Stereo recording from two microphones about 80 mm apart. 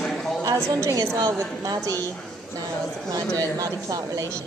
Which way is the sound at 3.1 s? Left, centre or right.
Right.